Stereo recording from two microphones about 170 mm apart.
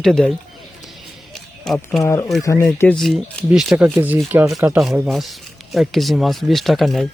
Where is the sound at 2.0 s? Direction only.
20° left (ahead or behind).